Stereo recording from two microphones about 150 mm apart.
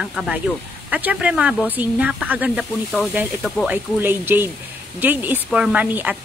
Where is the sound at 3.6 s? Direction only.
15° right (ahead or behind).